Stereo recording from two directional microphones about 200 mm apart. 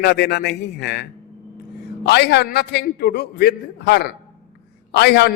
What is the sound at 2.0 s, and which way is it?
A man's voice, 55° left (ahead or behind).